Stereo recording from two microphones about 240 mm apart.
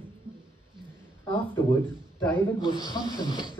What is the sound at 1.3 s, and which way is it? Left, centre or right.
A man's voice, centre.